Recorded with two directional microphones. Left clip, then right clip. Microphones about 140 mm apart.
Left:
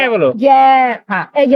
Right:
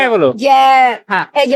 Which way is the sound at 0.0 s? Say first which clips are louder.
Even; 40° right (ahead or behind).